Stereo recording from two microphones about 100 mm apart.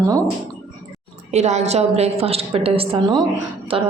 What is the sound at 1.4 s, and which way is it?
A woman's voice, 90° right.